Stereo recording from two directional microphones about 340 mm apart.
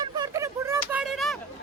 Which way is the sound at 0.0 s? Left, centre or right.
Centre.